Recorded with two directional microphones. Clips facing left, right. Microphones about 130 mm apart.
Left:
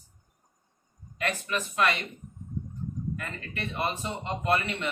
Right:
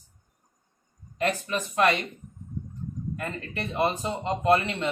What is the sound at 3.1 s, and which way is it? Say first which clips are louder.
A man's voice: right 4 dB; 35° right (ahead or behind).